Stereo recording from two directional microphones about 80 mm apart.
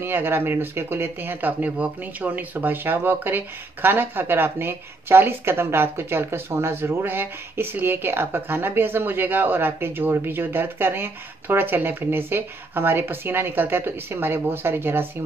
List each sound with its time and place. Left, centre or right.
0.0 s speech: right